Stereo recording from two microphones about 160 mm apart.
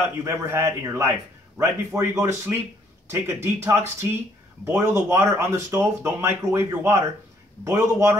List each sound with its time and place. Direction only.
0.2 s a man's voice: 15° right (ahead or behind)